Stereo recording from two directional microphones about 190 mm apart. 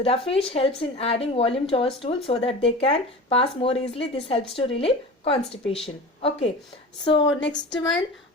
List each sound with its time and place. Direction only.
0.0 s a woman's voice: 30° left (ahead or behind)